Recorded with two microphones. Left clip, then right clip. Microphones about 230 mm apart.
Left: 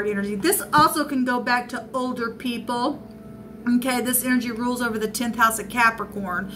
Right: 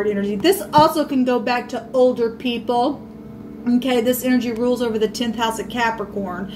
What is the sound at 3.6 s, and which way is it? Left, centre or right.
A woman's voice, left.